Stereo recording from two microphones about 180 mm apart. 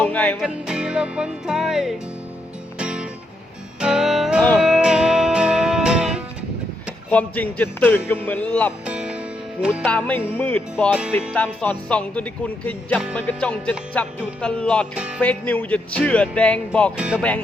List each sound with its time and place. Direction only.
0.0 s music: 10° left (ahead or behind)
0.3 s music: 5° right (ahead or behind)
7.1 s speech: 10° left (ahead or behind)
8.8 s music: 5° right (ahead or behind)
9.8 s speech: 10° left (ahead or behind)
14.4 s music: 5° left (ahead or behind)
15.2 s speech: 10° left (ahead or behind)
17.0 s music: 5° right (ahead or behind)